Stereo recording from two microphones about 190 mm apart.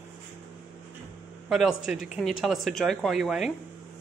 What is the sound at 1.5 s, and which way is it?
Speech, 5° right (ahead or behind).